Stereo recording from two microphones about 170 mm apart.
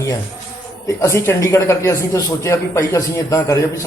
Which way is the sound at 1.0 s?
15° left (ahead or behind).